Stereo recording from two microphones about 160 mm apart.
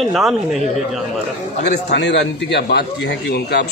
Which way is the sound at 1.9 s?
90° left.